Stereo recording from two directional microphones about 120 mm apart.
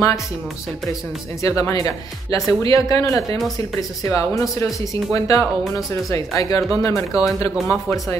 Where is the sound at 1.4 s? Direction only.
25° left (ahead or behind).